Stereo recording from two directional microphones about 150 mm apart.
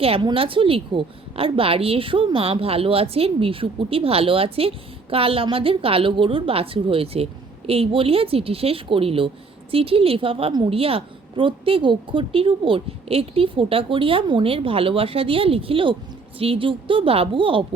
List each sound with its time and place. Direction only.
0.0 s a woman's voice: 35° right (ahead or behind)